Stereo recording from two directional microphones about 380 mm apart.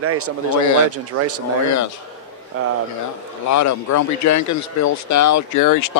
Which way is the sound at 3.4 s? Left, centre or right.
Left.